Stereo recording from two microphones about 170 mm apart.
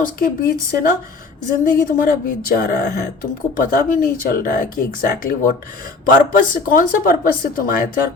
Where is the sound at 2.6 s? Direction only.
65° left (ahead or behind).